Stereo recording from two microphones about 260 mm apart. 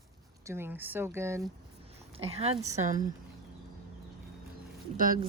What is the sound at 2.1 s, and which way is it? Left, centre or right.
Speech, right.